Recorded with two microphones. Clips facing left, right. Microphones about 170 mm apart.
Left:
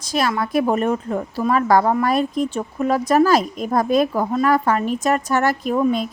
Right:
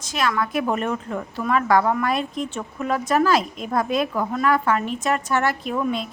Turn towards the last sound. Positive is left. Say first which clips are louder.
# left 6 dB
turn(degrees=40)  # may be behind; listen again after turning